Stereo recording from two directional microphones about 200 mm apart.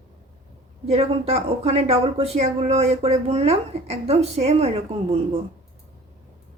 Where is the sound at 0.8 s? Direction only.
30° right (ahead or behind).